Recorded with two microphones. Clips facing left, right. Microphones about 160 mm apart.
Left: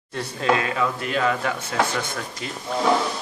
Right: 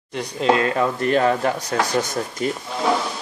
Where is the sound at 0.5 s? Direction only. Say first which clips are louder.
Right 4 dB; 35° right (ahead or behind).